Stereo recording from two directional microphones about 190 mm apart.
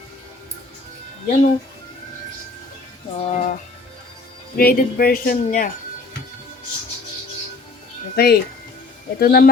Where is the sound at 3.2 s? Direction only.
40° left (ahead or behind).